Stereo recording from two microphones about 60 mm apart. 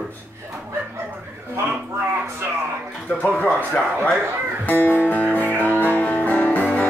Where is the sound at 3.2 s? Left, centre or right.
Left.